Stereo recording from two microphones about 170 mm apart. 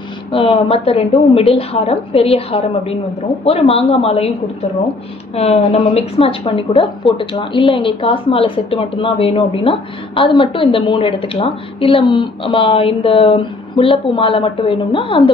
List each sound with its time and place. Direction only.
0.3 s speech: 35° left (ahead or behind)
5.3 s speech: 40° left (ahead or behind)